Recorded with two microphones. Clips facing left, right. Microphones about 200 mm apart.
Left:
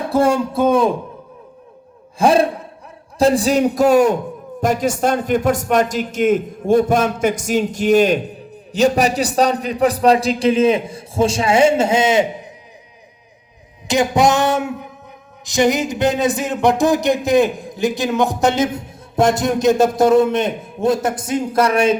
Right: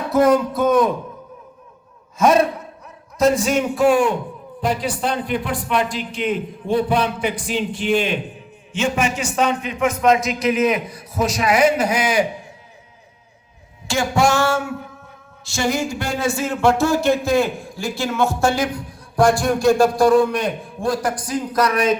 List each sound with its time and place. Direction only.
0.1 s speech: 30° left (ahead or behind)
2.1 s a man's voice: 30° left (ahead or behind)
13.8 s speech: 20° left (ahead or behind)